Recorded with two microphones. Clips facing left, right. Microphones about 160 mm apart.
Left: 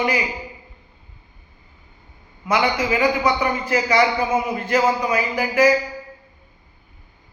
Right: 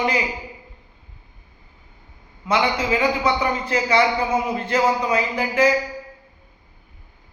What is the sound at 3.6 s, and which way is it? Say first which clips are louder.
Speech: left 1 dB; 30° right (ahead or behind).